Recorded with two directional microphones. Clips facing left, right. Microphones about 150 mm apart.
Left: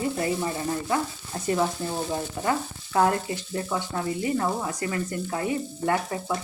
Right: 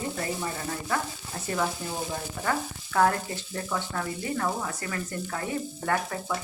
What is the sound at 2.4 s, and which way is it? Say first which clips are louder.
Frying: even; 20° left (ahead or behind).